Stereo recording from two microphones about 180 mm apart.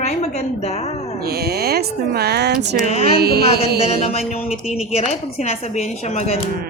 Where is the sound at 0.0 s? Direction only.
35° left (ahead or behind).